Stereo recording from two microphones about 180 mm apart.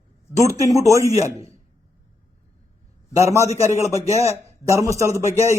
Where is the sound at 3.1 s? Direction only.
15° right (ahead or behind).